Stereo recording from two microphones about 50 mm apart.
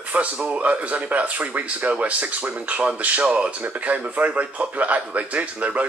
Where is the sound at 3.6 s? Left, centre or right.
Right.